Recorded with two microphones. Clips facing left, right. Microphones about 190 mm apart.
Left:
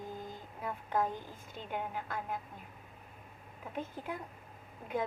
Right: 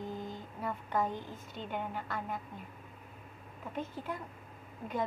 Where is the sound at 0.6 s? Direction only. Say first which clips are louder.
Even; 10° left (ahead or behind).